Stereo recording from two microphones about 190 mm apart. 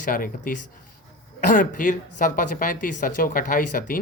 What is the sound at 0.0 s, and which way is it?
Speech, 45° left (ahead or behind).